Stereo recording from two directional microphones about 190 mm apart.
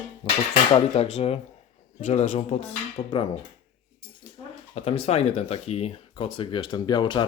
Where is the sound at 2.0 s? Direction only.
40° left (ahead or behind).